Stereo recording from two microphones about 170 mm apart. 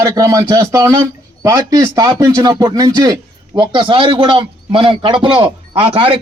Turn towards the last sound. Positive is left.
turn(degrees=-35)  # may be behind; listen again after turning